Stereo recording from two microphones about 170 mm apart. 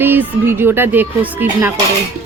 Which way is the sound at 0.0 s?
15° right (ahead or behind).